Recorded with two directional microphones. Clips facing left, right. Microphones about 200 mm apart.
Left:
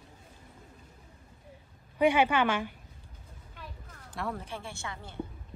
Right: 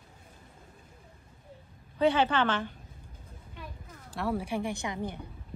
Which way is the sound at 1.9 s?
10° left (ahead or behind).